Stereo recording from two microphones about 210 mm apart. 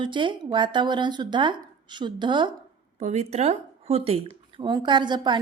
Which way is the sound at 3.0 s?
30° right (ahead or behind).